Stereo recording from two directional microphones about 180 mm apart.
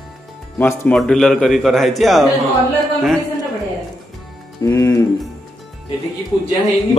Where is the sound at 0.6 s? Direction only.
10° left (ahead or behind).